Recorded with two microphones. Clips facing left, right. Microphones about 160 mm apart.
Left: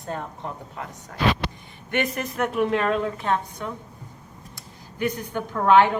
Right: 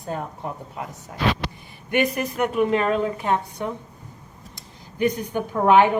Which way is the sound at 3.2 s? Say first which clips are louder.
Right 2 dB; 15° right (ahead or behind).